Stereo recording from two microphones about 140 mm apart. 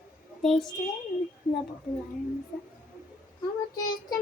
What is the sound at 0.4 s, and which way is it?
Speech, centre (ahead or behind).